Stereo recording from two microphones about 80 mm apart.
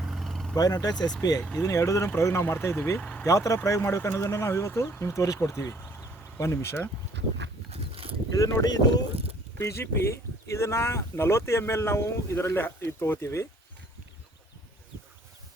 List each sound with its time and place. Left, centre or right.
0.1 s vehicle: centre
0.5 s speech: left
1.4 s speech: centre
1.6 s speech: left
3.0 s speech: centre
3.2 s speech: left
8.4 s speech: left
8.6 s speech: left
9.6 s speech: left